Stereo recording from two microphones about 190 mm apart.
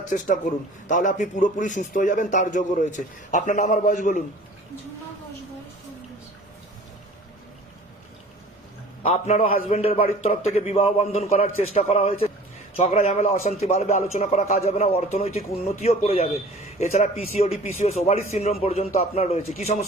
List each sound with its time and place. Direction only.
0.9 s a man's voice: 40° left (ahead or behind)
9.2 s a man's voice: 35° left (ahead or behind)